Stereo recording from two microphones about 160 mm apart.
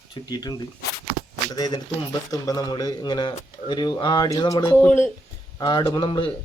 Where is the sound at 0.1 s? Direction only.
25° left (ahead or behind); by 5.1 s 10° left (ahead or behind).